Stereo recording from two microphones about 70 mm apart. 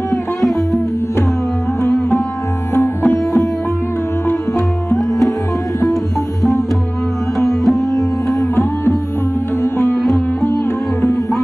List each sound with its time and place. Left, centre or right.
0.4 s music: centre
2.7 s music: left
4.6 s music: centre
7.3 s sitar: centre
9.6 s sitar: left
9.9 s sitar: centre